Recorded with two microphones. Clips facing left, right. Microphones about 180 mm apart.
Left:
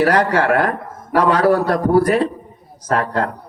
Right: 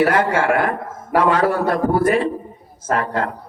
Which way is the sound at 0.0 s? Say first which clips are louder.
Left 1 dB; 40° left (ahead or behind).